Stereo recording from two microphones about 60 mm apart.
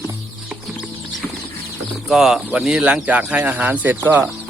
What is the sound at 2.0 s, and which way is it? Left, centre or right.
Speech, centre.